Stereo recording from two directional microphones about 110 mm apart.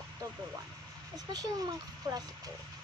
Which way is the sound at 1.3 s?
35° right (ahead or behind).